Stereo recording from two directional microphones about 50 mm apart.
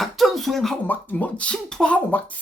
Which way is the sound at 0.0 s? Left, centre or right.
Centre.